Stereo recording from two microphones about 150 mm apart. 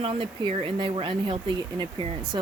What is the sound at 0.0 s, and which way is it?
Speech, 35° right (ahead or behind).